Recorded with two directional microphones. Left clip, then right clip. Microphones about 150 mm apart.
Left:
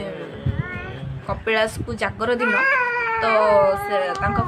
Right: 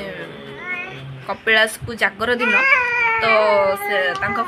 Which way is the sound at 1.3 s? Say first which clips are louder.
Right 5 dB; 10° left (ahead or behind).